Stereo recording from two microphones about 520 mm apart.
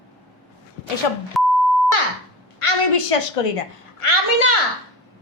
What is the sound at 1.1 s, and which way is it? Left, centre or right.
Speech, left.